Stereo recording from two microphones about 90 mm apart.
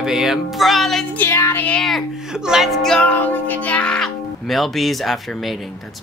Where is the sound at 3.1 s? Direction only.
20° left (ahead or behind).